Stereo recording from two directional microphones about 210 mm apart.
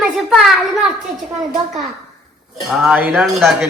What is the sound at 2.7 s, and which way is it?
Speech, 5° right (ahead or behind).